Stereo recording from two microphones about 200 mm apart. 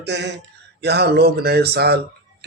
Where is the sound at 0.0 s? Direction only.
60° right (ahead or behind).